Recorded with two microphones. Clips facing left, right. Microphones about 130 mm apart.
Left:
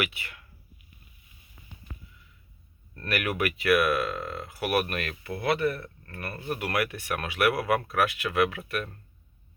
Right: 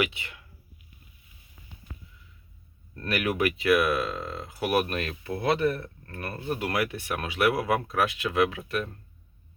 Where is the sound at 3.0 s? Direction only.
20° right (ahead or behind).